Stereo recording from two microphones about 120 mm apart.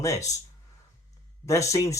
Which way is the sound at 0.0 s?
25° left (ahead or behind).